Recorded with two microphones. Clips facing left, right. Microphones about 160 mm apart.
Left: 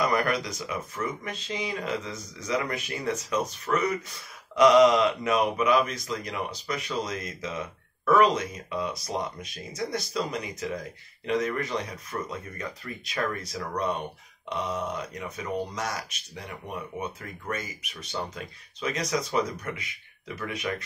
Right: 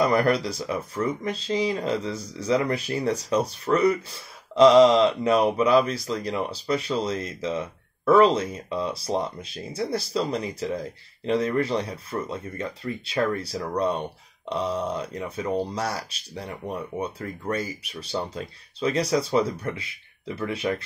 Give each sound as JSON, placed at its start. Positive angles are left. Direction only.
{"t": 0.0, "sound": "speech", "side_deg": -30}